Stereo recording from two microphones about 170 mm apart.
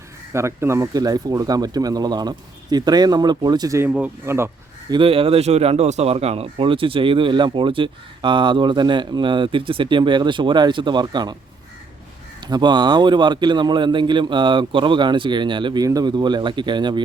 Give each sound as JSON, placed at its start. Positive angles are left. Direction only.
{"t": 0.3, "sound": "a man's voice", "side_deg": -15}
{"t": 4.9, "sound": "a man's voice", "side_deg": -30}
{"t": 12.5, "sound": "a man's voice", "side_deg": -25}